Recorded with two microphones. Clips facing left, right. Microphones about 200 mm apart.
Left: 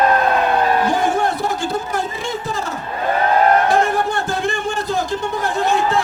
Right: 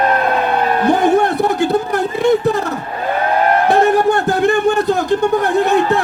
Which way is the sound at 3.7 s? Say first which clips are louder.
Right 5 dB; 65° right (ahead or behind).